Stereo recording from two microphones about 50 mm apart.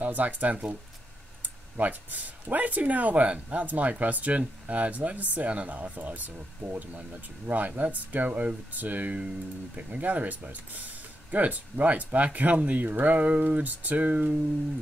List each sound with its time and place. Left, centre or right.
0.0 s speech: right
7.4 s speech: right